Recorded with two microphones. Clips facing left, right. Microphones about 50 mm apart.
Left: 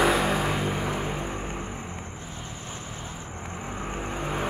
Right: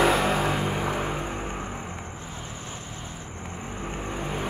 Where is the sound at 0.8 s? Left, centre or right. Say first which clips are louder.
Right 1 dB; centre.